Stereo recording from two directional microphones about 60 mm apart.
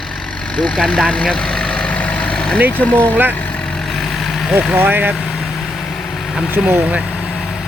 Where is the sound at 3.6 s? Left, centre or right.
Centre.